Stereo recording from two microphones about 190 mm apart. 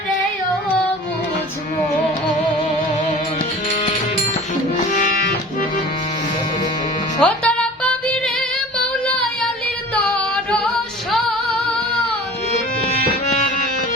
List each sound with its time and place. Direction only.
7.2 s music: 5° left (ahead or behind)
9.9 s singing: 5° left (ahead or behind)
12.9 s music: 35° left (ahead or behind)